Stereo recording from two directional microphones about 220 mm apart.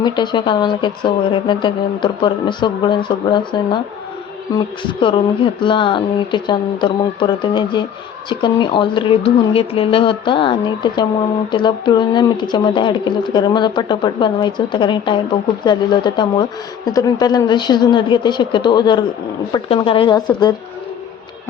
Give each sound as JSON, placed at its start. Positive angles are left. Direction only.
{"t": 0.0, "sound": "speech", "side_deg": 20}